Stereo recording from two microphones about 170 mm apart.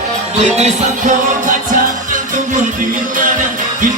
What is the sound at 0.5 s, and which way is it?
Music, 40° right (ahead or behind).